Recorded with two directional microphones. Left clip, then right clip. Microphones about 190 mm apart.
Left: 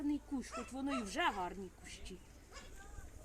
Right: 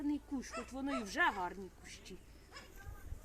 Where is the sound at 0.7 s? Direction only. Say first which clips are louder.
Even; 10° left (ahead or behind).